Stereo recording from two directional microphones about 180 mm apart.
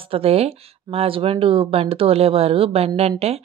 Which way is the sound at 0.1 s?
35° right (ahead or behind).